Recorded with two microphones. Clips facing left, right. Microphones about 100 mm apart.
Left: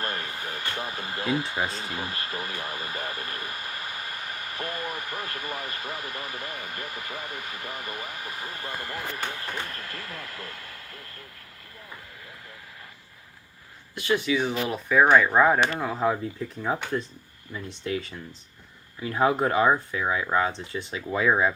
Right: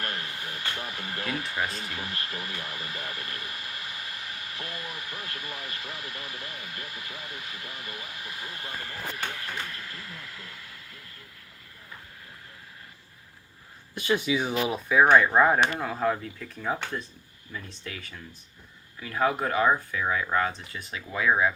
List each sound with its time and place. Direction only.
0.0 s speech: 35° left (ahead or behind)
9.9 s speech: 70° left (ahead or behind)
14.0 s speech: 20° right (ahead or behind); by 15.9 s centre (ahead or behind)
15.9 s speech: 15° left (ahead or behind)